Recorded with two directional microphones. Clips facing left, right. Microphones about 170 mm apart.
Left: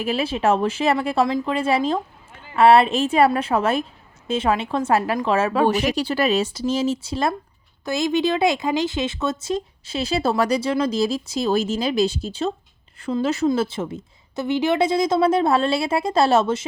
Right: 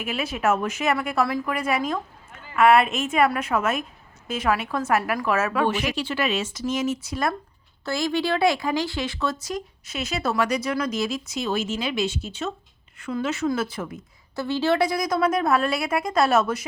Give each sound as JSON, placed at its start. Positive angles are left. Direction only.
{"t": 0.0, "sound": "a woman's voice", "side_deg": 30}